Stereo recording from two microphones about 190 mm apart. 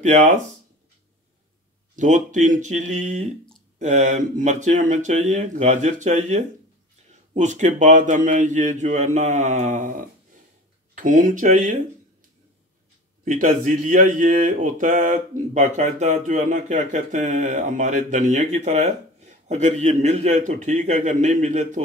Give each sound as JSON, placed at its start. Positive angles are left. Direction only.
{"t": 0.0, "sound": "speech", "side_deg": -40}
{"t": 2.0, "sound": "speech", "side_deg": -40}
{"t": 13.2, "sound": "speech", "side_deg": -45}